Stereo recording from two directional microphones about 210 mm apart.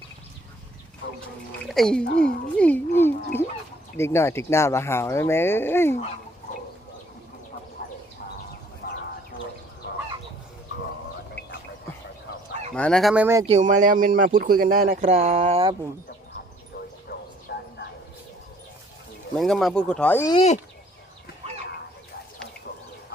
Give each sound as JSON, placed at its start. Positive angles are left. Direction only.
{"t": 1.6, "sound": "speech", "side_deg": 0}
{"t": 7.8, "sound": "bow-wow", "side_deg": 45}
{"t": 8.8, "sound": "a sound", "side_deg": 45}
{"t": 12.7, "sound": "speech", "side_deg": 5}
{"t": 13.5, "sound": "speech", "side_deg": -35}
{"t": 17.5, "sound": "a sound", "side_deg": 50}
{"t": 19.4, "sound": "speech", "side_deg": 0}
{"t": 20.3, "sound": "speech", "side_deg": 30}